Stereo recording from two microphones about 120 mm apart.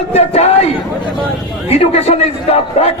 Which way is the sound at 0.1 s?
60° left (ahead or behind).